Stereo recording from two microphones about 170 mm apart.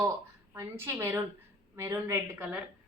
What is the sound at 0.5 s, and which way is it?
A woman's voice, 15° right (ahead or behind).